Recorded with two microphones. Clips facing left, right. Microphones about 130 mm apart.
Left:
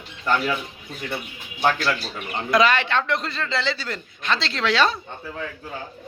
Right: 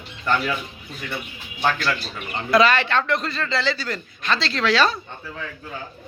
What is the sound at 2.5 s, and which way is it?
A man's voice, 15° left (ahead or behind).